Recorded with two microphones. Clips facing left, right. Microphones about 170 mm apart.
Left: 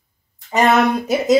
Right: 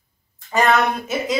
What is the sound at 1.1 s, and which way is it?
Speech, 35° left (ahead or behind).